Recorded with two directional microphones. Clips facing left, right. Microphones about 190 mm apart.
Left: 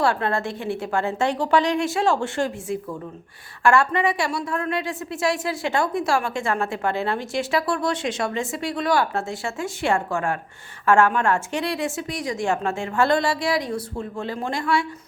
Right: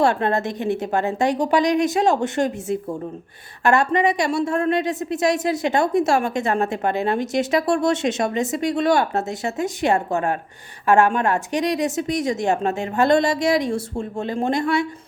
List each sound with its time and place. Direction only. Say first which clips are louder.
0.0 s a woman's voice: right 3 dB; 20° right (ahead or behind)